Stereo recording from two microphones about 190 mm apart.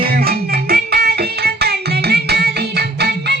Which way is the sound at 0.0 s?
50° right (ahead or behind).